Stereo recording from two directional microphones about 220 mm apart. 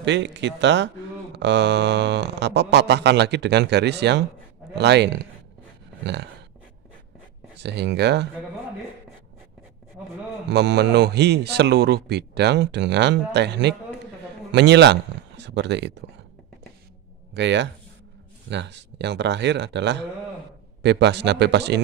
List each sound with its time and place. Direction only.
0.0 s speech: 55° right (ahead or behind)
7.5 s speech: 50° right (ahead or behind)
10.5 s speech: 50° right (ahead or behind)
17.3 s speech: 55° right (ahead or behind)